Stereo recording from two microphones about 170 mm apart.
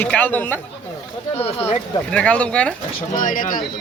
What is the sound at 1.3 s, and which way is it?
Speech, 35° left (ahead or behind).